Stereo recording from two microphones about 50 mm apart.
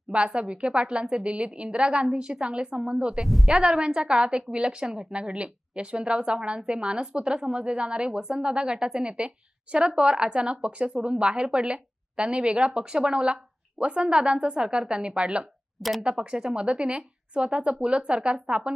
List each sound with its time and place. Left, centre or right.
0.1 s a woman's voice: right
3.2 s speech: centre
3.5 s a woman's voice: centre
15.8 s speech: centre
16.2 s speech: centre